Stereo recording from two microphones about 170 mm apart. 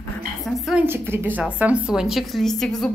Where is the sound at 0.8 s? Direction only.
15° right (ahead or behind).